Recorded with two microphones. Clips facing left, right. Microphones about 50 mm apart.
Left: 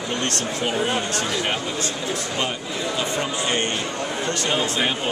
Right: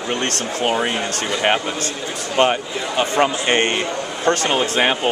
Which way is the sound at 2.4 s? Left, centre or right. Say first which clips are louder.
Right 8 dB; right.